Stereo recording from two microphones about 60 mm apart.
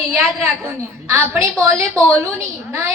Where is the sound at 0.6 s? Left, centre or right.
Right.